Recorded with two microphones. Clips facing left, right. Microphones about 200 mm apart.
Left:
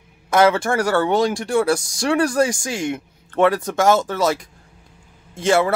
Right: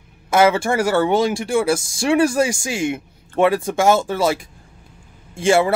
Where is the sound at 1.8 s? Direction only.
25° right (ahead or behind).